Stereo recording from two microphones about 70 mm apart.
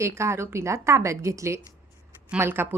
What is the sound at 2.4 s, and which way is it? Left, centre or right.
Speech, right.